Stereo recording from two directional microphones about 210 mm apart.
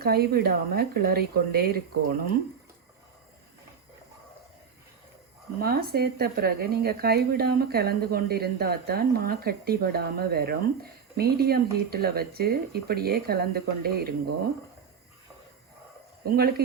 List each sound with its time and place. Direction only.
0.0 s speech: 45° right (ahead or behind)
5.5 s speech: 45° right (ahead or behind)
16.2 s speech: 45° right (ahead or behind)